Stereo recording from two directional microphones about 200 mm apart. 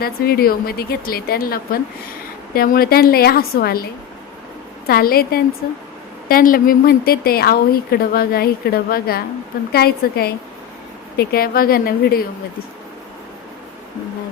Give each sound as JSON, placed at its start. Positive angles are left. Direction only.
{"t": 0.0, "sound": "a woman's voice", "side_deg": 50}
{"t": 4.9, "sound": "a woman's voice", "side_deg": 50}